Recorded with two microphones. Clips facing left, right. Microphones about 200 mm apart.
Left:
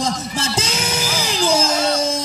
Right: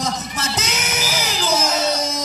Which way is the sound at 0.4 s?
30° left (ahead or behind).